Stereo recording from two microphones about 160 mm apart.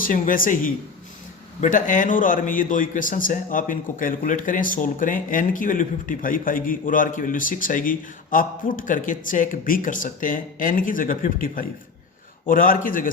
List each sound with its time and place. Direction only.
0.0 s speech: 60° left (ahead or behind)